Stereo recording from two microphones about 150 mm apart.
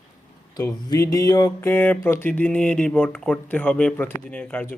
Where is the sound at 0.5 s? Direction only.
20° left (ahead or behind).